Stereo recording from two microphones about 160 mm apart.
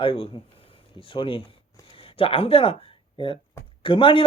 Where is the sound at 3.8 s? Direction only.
30° left (ahead or behind).